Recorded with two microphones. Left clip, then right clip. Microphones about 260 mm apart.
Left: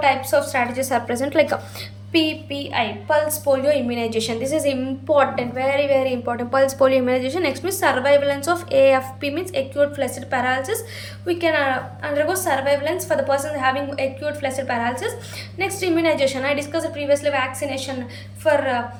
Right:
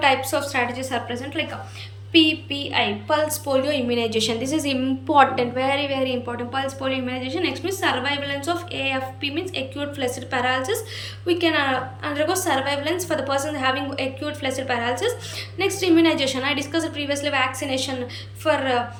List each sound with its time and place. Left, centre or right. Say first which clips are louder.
0.0 s a woman's voice: left 2 dB; centre